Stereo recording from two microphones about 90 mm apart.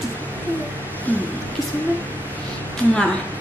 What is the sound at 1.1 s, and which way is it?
Speech, 20° left (ahead or behind).